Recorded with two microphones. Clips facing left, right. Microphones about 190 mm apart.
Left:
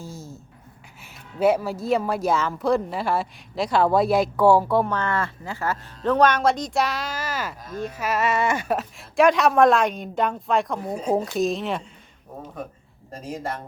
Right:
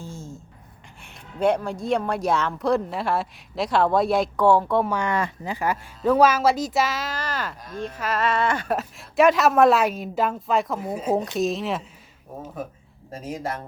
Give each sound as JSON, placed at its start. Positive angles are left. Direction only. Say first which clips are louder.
{"t": 0.0, "sound": "a sound", "louder": "even", "side_deg": 35}
{"t": 1.0, "sound": "speech", "louder": "left 2 dB", "side_deg": 5}
{"t": 4.9, "sound": "speech", "louder": "right 1 dB", "side_deg": -15}
{"t": 8.7, "sound": "speech", "louder": "even", "side_deg": 0}